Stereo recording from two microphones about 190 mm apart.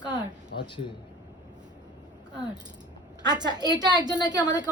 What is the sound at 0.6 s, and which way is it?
Speech, 25° left (ahead or behind).